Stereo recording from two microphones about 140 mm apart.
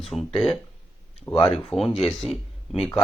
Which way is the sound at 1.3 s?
40° left (ahead or behind).